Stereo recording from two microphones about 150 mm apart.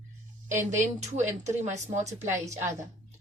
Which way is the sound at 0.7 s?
55° right (ahead or behind).